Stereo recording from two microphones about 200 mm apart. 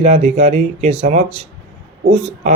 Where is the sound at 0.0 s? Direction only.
30° right (ahead or behind).